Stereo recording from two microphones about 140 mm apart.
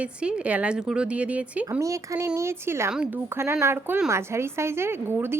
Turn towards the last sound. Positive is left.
turn(degrees=-15)  # may be behind; listen again after turning